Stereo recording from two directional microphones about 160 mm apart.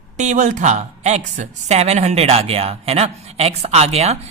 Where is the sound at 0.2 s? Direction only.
50° right (ahead or behind).